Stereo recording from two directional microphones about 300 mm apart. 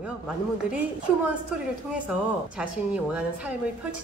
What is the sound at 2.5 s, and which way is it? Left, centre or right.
Speech, centre.